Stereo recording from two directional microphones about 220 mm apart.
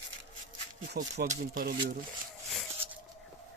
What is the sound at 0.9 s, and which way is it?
Speech, 40° right (ahead or behind).